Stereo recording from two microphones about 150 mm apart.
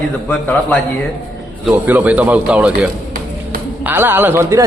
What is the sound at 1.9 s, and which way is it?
Speech, 10° right (ahead or behind).